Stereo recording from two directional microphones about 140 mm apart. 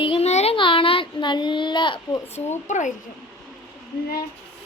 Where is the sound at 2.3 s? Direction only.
55° left (ahead or behind).